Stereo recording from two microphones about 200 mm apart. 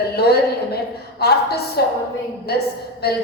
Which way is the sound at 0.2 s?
50° left (ahead or behind).